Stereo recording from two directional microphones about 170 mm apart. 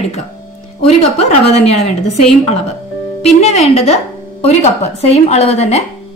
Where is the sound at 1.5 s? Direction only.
40° left (ahead or behind).